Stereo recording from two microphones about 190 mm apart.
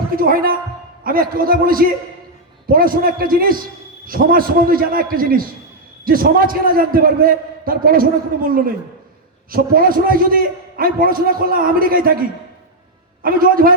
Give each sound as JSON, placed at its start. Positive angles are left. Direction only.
{"t": 0.2, "sound": "a man's voice", "side_deg": -50}
{"t": 13.2, "sound": "a man's voice", "side_deg": -50}